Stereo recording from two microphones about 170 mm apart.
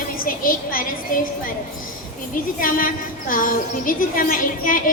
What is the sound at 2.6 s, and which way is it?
A woman's voice, 55° left (ahead or behind).